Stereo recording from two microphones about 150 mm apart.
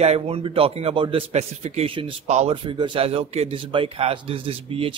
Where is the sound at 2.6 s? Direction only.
35° right (ahead or behind).